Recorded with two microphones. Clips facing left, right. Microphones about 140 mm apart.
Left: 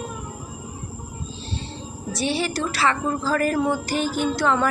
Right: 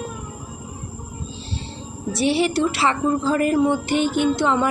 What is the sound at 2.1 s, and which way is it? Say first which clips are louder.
A woman's voice: right 5 dB; 25° right (ahead or behind).